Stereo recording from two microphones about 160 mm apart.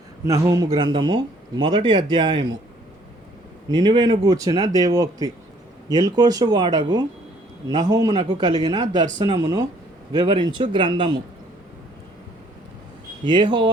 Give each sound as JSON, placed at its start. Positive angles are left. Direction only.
{"t": 0.3, "sound": "speech", "side_deg": -20}
{"t": 3.7, "sound": "speech", "side_deg": -30}
{"t": 13.2, "sound": "speech", "side_deg": -30}